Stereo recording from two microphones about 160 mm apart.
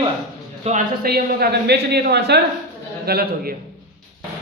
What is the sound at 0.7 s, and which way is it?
Speech, 40° right (ahead or behind).